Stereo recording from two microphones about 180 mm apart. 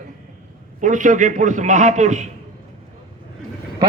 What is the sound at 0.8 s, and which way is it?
A man's voice, 45° right (ahead or behind).